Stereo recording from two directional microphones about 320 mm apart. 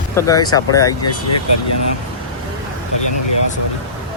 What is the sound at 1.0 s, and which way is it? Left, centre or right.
Speech, left.